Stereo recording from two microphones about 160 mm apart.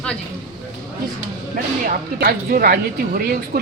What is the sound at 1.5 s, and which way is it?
Speech, 65° right (ahead or behind).